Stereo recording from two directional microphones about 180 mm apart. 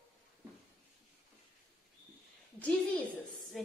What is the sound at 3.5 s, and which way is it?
Speech, centre (ahead or behind).